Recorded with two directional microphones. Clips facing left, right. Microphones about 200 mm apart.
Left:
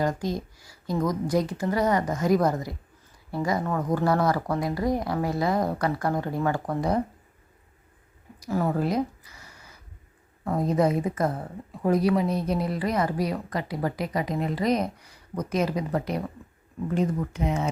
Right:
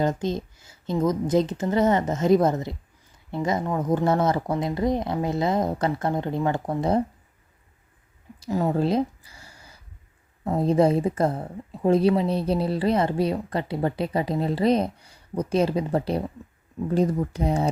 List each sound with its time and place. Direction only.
0.0 s a woman's voice: 25° right (ahead or behind)
8.4 s a sound: 20° right (ahead or behind)
10.4 s a woman's voice: 25° right (ahead or behind)